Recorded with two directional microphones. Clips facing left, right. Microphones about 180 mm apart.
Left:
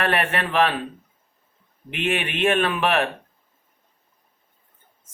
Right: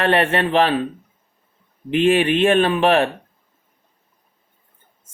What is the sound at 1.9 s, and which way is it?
Speech, 35° right (ahead or behind).